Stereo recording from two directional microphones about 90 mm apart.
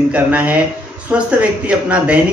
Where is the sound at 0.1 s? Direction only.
15° right (ahead or behind).